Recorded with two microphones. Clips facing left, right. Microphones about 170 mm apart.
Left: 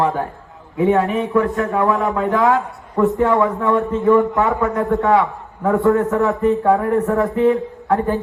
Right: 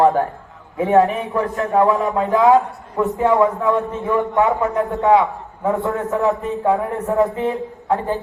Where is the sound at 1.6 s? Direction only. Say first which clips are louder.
Right 1 dB; 20° right (ahead or behind).